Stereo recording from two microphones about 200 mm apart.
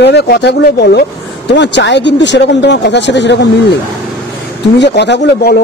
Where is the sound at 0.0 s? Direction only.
55° left (ahead or behind).